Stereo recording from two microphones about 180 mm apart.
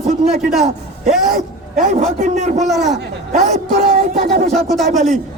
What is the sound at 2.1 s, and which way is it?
Speech, 40° right (ahead or behind).